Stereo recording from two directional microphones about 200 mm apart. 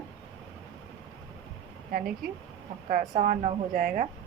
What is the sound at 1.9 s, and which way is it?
A woman's voice, 45° right (ahead or behind).